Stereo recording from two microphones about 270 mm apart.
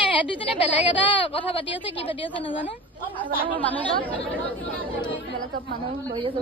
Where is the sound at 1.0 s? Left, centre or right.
Centre.